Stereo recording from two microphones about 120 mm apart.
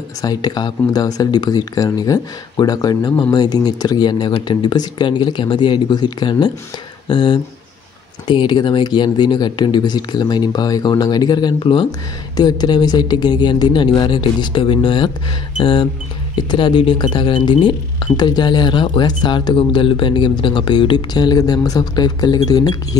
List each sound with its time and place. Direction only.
0.2 s speech: 35° left (ahead or behind)